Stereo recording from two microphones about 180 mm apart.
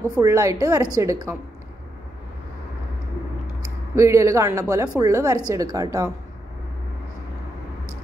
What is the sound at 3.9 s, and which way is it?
A woman's voice, 15° right (ahead or behind).